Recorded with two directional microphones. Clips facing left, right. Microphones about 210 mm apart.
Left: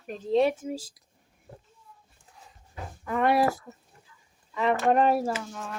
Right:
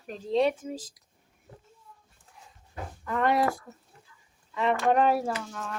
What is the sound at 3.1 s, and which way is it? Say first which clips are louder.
Speech: left 2 dB; 10° left (ahead or behind).